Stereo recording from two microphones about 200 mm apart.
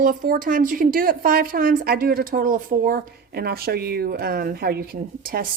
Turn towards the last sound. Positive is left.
turn(degrees=-45)  # may be behind; listen again after turning